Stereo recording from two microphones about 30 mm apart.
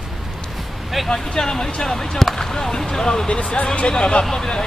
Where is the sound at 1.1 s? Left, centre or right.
Left.